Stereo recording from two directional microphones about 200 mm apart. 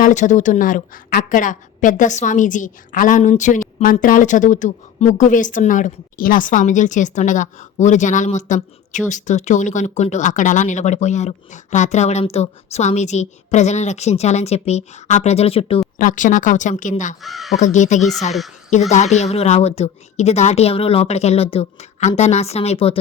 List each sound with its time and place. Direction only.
0.0 s a woman's voice: 40° left (ahead or behind)
16.0 s a woman's voice: 40° left (ahead or behind)
17.2 s speech: centre (ahead or behind)
17.6 s a woman's voice: 35° left (ahead or behind)